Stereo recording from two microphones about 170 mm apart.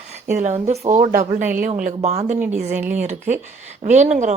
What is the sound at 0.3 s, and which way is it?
A woman's voice, 45° right (ahead or behind).